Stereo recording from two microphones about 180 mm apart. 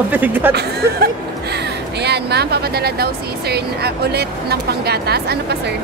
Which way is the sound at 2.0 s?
65° right (ahead or behind).